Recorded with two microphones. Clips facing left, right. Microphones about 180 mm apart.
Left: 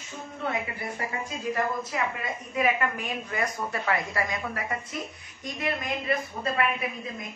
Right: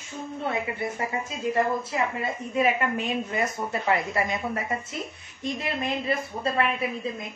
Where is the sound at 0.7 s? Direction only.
25° right (ahead or behind).